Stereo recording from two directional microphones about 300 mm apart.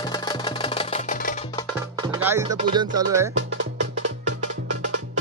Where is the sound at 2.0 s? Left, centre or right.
Centre.